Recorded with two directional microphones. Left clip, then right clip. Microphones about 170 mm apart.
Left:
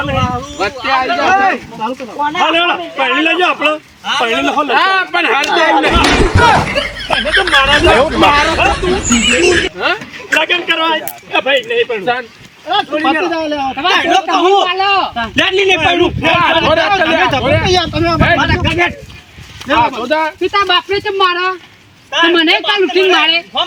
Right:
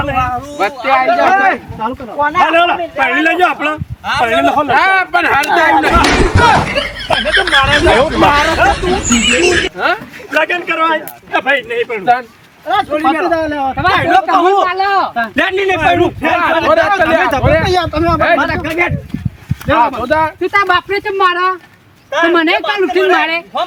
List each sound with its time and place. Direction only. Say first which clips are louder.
0.6 s speech: right 3 dB; 5° right (ahead or behind)
2.4 s a man's voice: right 2 dB; 15° right (ahead or behind); by 9.7 s centre (ahead or behind)
9.7 s a man's voice: right 1 dB; 10° right (ahead or behind)
15.4 s a man's voice: left 3 dB; 20° right (ahead or behind); by 23.4 s centre (ahead or behind)